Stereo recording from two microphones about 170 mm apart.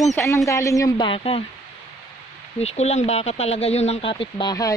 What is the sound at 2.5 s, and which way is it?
Speech, 40° left (ahead or behind).